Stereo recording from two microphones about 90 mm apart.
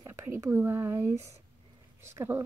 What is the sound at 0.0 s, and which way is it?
Speech, 30° right (ahead or behind).